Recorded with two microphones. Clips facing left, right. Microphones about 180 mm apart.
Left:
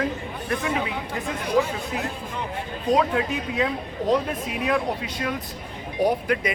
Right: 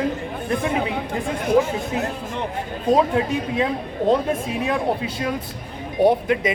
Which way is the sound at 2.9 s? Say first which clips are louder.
Right 3 dB; 30° right (ahead or behind).